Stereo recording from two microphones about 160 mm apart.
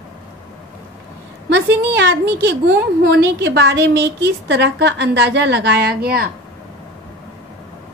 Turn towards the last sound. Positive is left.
turn(degrees=-70)  # may be behind; listen again after turning